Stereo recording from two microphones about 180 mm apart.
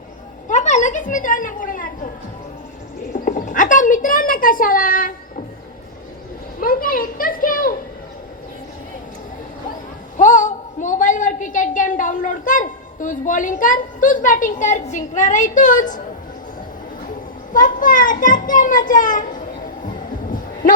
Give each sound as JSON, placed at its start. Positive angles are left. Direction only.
{"t": 0.4, "sound": "a woman's voice", "side_deg": 40}
{"t": 3.1, "sound": "speech", "side_deg": 45}
{"t": 6.6, "sound": "a sound", "side_deg": 50}
{"t": 10.2, "sound": "a woman's voice", "side_deg": 45}
{"t": 17.5, "sound": "a child's voice", "side_deg": 50}
{"t": 20.3, "sound": "a sound", "side_deg": 50}